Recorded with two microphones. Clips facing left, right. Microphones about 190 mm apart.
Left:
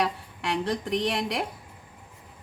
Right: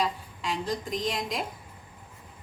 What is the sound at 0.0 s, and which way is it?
A woman's voice, 70° left (ahead or behind).